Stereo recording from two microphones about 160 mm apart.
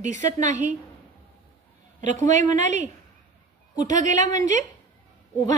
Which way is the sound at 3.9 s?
50° right (ahead or behind).